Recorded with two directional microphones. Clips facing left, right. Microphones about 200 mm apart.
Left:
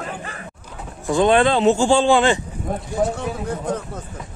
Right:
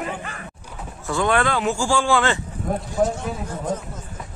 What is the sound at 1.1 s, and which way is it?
A man's voice, 20° left (ahead or behind).